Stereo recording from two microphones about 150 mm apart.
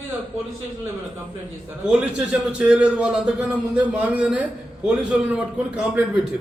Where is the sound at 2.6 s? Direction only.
10° right (ahead or behind).